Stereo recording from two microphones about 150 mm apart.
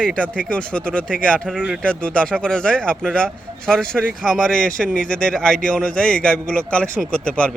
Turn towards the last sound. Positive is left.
turn(degrees=5)  # may be behind; listen again after turning